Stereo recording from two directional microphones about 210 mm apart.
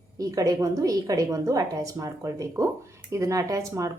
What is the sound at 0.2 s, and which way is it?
A woman's voice, 15° right (ahead or behind).